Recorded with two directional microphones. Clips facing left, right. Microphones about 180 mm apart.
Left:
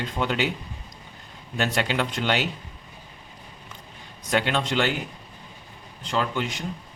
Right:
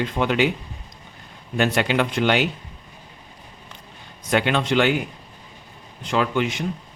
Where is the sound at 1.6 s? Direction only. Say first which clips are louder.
Right 5 dB; 60° right (ahead or behind).